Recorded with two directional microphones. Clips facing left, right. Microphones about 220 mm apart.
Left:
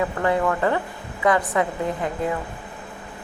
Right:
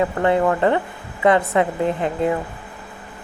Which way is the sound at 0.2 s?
25° right (ahead or behind).